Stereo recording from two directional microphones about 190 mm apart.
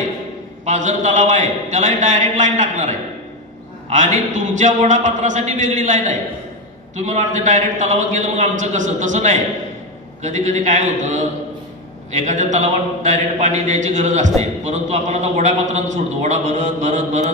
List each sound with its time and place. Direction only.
0.7 s a man's voice: 40° right (ahead or behind)